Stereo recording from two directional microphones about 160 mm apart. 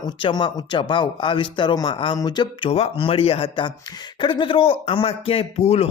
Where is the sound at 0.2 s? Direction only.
30° left (ahead or behind).